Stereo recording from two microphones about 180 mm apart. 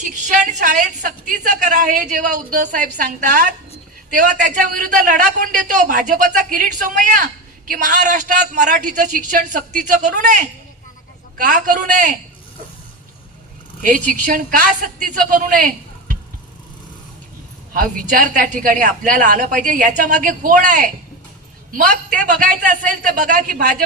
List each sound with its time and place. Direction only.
0.0 s a woman's voice: 45° right (ahead or behind)
11.3 s a woman's voice: 50° right (ahead or behind)
13.8 s a woman's voice: 45° right (ahead or behind)
17.7 s a woman's voice: 45° right (ahead or behind)